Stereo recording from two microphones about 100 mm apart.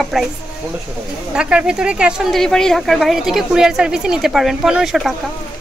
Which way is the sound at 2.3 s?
5° left (ahead or behind).